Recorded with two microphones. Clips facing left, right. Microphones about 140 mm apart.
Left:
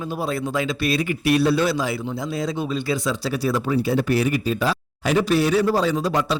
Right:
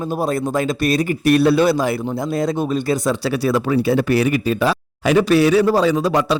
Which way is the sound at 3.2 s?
70° right (ahead or behind).